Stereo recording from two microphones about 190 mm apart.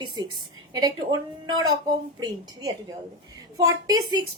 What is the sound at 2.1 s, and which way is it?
A child's voice, 20° right (ahead or behind).